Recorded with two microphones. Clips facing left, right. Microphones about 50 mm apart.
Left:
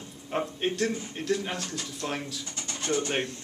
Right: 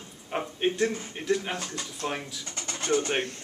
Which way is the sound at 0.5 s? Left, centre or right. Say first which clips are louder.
Right 5 dB; centre.